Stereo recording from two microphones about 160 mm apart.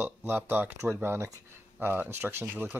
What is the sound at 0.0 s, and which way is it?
Speech, 10° right (ahead or behind).